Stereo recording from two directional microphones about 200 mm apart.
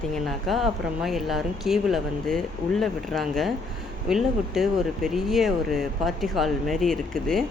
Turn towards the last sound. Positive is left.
turn(degrees=0)  # may be behind; listen again after turning